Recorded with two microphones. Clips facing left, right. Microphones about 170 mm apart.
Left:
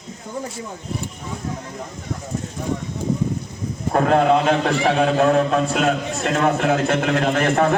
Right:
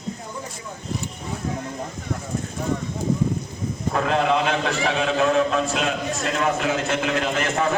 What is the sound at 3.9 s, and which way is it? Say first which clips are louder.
A man's voice: left 5 dB; 45° left (ahead or behind).